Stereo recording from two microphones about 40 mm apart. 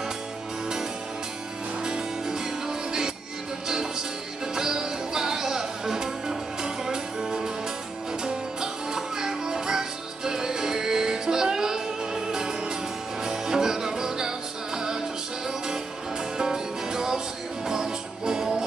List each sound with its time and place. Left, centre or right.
1.9 s music: centre
4.6 s music: centre
16.3 s music: centre